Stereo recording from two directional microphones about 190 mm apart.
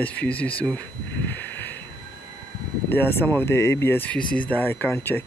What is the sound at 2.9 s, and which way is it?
Speech, 10° left (ahead or behind).